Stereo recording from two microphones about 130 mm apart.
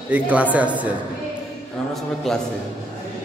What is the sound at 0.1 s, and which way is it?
Speech, 10° right (ahead or behind).